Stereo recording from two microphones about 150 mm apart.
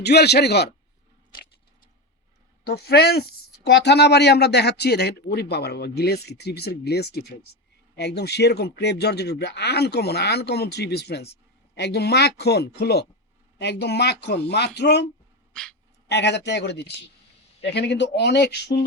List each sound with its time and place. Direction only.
0.0 s a woman's voice: 90° left
2.6 s a woman's voice: 90° left
16.4 s a woman's voice: 90° left